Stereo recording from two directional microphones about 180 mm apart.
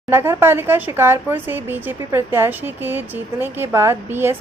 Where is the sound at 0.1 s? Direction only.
10° right (ahead or behind).